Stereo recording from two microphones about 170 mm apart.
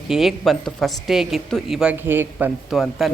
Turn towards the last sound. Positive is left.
turn(degrees=0)  # may be behind; listen again after turning